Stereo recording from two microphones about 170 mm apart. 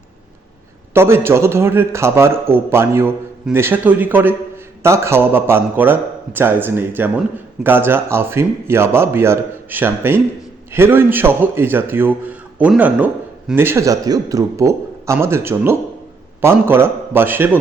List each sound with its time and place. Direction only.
0.9 s a man's voice: 15° right (ahead or behind)